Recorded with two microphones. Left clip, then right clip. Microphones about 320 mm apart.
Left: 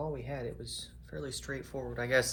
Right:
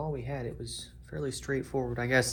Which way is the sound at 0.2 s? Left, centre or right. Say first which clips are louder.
Right 2 dB; centre.